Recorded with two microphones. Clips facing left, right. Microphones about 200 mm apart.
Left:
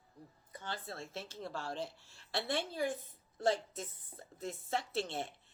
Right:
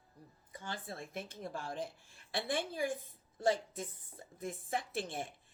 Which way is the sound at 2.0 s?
50° right (ahead or behind).